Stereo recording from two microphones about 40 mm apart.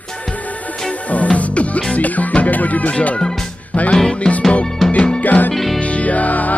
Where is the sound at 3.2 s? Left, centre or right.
Centre.